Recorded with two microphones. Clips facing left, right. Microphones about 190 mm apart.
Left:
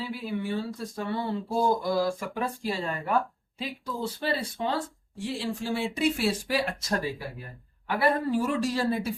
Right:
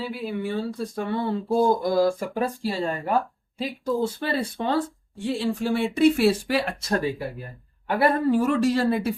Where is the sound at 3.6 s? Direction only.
45° right (ahead or behind).